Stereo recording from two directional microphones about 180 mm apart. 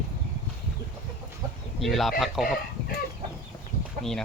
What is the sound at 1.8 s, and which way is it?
Speech, centre (ahead or behind).